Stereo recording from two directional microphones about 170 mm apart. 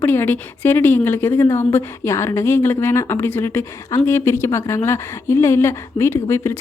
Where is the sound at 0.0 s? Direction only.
15° left (ahead or behind).